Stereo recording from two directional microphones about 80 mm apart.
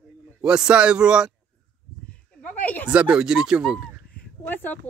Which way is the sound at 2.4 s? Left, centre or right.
Left.